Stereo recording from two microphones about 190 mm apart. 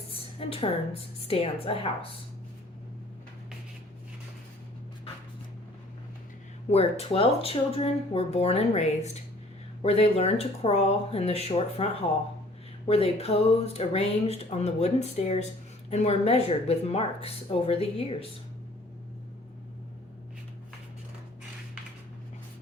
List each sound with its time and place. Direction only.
0.1 s a sound: 30° left (ahead or behind)
1.2 s speech: 30° left (ahead or behind)
6.7 s speech: 35° left (ahead or behind)
12.9 s speech: 30° left (ahead or behind)